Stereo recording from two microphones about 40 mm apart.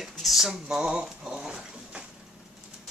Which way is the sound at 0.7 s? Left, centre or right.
Centre.